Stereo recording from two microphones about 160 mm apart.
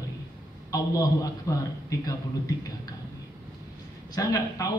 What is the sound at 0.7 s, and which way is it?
Speech, 20° left (ahead or behind).